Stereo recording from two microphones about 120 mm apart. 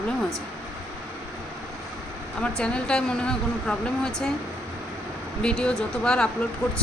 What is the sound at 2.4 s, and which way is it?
Speech, 10° left (ahead or behind).